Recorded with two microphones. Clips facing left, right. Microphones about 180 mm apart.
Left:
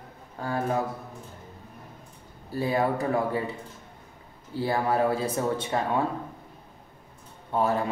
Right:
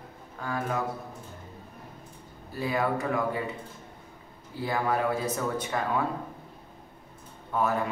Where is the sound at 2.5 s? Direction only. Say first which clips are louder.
Left 3 dB; 30° left (ahead or behind).